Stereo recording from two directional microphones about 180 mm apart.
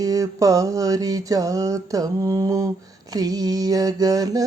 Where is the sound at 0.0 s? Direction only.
20° right (ahead or behind).